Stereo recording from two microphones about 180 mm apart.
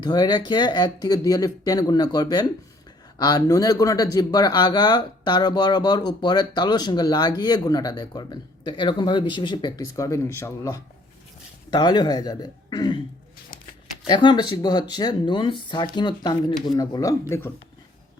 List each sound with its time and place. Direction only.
0.0 s speech: 25° left (ahead or behind)
14.1 s speech: 25° left (ahead or behind)